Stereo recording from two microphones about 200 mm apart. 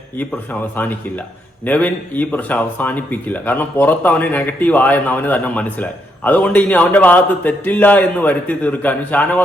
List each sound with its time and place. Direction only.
1.6 s speech: 10° left (ahead or behind)